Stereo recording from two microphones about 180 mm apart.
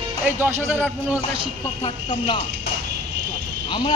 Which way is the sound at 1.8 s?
25° left (ahead or behind).